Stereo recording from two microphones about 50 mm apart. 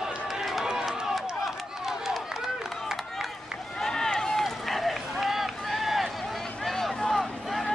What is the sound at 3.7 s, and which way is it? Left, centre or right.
Run, centre.